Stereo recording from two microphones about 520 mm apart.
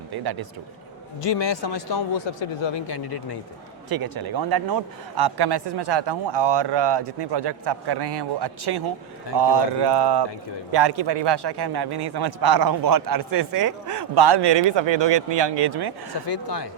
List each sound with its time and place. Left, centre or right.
0.1 s a man's voice: right
1.2 s speech: left
3.9 s a man's voice: right
16.1 s speech: left